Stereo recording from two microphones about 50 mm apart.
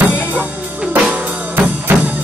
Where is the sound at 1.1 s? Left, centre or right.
Right.